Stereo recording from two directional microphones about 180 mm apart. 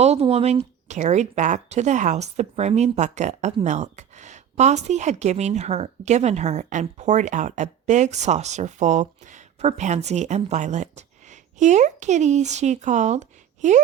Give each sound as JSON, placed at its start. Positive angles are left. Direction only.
{"t": 0.0, "sound": "speech", "side_deg": -35}